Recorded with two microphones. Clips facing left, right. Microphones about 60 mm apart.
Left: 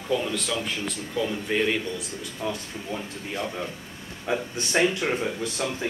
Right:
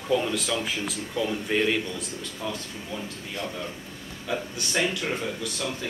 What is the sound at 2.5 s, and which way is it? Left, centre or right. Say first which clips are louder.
Speech: left 3 dB; left.